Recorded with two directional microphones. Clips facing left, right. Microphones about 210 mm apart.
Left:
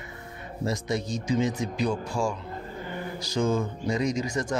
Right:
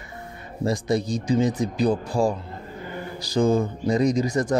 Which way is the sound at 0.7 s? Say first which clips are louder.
Right 6 dB; 35° right (ahead or behind).